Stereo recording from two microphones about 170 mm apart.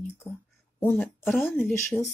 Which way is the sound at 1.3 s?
Centre (ahead or behind).